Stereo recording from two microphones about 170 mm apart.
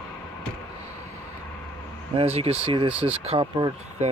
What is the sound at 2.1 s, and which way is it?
Speech, 35° right (ahead or behind).